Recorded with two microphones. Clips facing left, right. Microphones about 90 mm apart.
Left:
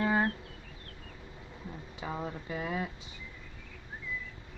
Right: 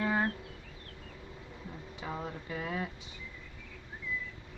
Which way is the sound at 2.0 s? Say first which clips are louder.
Left 2 dB; 10° left (ahead or behind).